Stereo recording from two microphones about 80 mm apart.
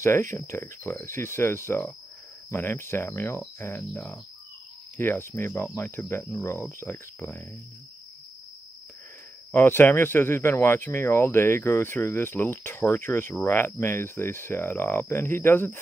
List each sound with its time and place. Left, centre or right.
0.0 s speech: left
9.5 s speech: left